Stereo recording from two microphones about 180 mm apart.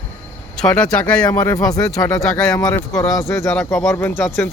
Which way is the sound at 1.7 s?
20° left (ahead or behind).